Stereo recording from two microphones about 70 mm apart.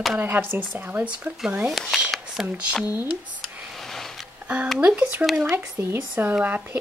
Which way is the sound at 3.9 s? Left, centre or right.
Centre.